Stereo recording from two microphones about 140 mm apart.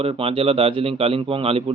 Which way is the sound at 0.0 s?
40° right (ahead or behind).